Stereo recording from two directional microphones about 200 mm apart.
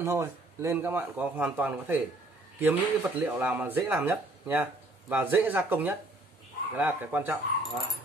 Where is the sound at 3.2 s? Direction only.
10° right (ahead or behind).